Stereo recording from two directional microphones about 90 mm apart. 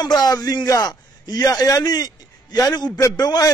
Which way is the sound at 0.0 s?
45° left (ahead or behind).